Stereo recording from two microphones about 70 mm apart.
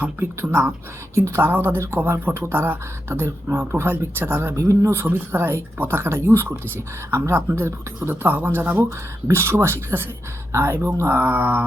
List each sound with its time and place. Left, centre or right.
1.1 s speech: right
4.5 s speech: right
4.9 s speech: right